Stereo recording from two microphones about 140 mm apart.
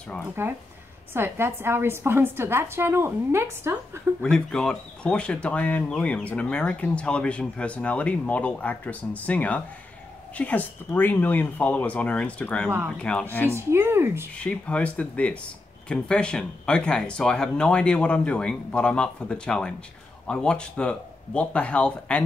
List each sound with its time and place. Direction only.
0.4 s a woman's voice: 15° right (ahead or behind)
4.2 s speech: 5° left (ahead or behind)
12.6 s a woman's voice: 15° right (ahead or behind)
13.0 s speech: 10° left (ahead or behind)
13.5 s a woman's voice: 20° right (ahead or behind)
14.3 s speech: 10° left (ahead or behind)